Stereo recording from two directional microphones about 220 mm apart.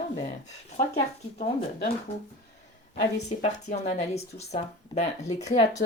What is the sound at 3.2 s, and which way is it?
Speech, 30° left (ahead or behind).